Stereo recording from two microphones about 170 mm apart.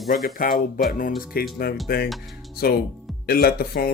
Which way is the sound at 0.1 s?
55° left (ahead or behind).